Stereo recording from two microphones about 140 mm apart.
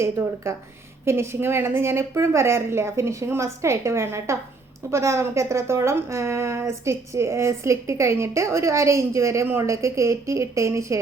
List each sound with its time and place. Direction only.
0.0 s a woman's voice: 20° right (ahead or behind)